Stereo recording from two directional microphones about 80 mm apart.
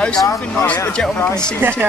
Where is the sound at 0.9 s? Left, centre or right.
Centre.